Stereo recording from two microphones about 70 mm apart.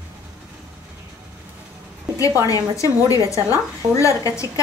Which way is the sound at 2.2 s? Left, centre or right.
Left.